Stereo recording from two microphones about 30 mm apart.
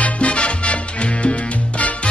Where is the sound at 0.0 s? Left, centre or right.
Left.